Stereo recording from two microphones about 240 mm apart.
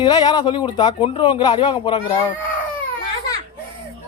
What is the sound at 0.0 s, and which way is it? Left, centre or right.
Speech, centre.